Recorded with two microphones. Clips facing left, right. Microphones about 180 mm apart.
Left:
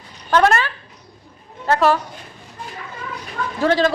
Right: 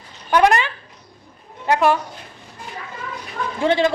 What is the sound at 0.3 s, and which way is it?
A woman's voice, 15° right (ahead or behind).